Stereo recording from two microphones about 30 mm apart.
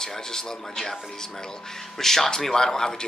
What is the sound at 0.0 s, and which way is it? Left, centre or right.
Speech, centre.